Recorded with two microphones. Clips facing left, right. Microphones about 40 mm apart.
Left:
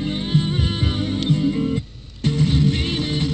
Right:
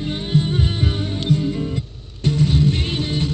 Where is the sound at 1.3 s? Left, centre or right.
Left.